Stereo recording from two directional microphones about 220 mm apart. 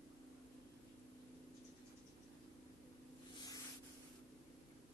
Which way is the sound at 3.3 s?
15° left (ahead or behind).